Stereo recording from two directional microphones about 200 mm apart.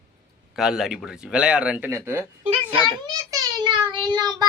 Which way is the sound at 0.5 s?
Centre (ahead or behind).